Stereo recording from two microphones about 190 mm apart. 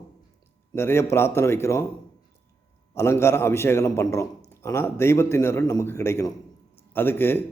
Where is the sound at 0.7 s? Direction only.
15° left (ahead or behind).